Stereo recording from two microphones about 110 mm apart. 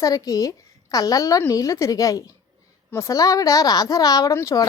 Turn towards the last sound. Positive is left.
turn(degrees=30)  # may be behind; listen again after turning